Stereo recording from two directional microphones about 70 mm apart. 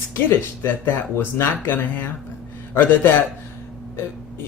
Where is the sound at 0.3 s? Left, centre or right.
Left.